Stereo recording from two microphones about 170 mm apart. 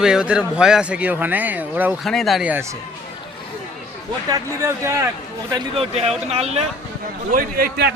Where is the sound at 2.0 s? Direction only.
Centre (ahead or behind).